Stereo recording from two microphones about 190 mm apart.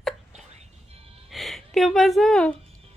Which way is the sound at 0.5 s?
30° right (ahead or behind).